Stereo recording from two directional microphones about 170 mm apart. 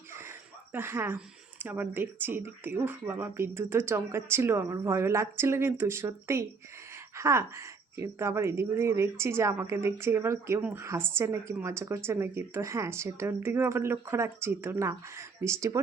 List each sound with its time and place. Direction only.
0.7 s a woman's voice: 15° right (ahead or behind)